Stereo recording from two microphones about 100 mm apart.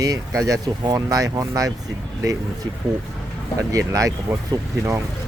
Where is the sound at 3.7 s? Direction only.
35° right (ahead or behind).